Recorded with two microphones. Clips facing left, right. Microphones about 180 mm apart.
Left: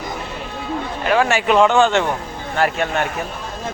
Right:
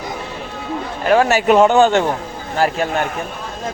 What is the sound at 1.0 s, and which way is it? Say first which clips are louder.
A man's voice: right 4 dB; 45° right (ahead or behind).